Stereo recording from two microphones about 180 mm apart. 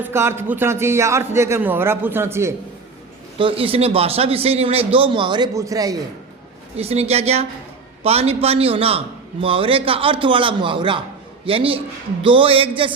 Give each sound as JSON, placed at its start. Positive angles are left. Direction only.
{"t": 0.0, "sound": "a man's voice", "side_deg": -15}
{"t": 3.3, "sound": "a man's voice", "side_deg": -30}
{"t": 6.7, "sound": "a man's voice", "side_deg": -35}